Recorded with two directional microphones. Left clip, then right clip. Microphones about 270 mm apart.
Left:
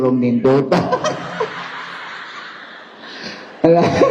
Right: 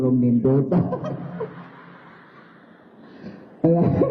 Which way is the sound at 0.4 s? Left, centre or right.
Centre.